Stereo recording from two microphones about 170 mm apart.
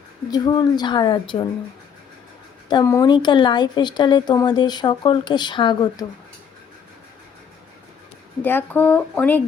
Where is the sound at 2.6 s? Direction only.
20° left (ahead or behind).